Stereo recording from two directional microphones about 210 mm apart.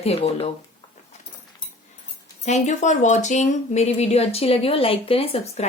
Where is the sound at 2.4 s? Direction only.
35° left (ahead or behind).